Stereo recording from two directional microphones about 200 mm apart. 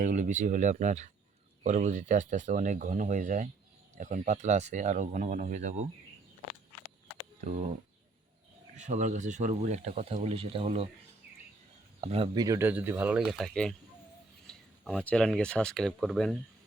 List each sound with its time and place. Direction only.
0.0 s speech: 40° right (ahead or behind)
8.7 s speech: 35° right (ahead or behind)
11.9 s speech: 30° right (ahead or behind); by 16.4 s centre (ahead or behind)